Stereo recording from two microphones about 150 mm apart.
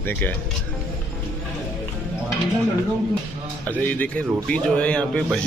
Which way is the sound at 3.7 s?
10° left (ahead or behind).